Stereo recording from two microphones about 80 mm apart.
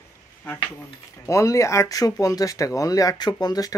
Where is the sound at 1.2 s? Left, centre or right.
Left.